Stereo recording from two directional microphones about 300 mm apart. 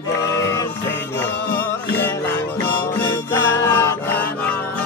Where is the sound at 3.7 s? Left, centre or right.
Centre.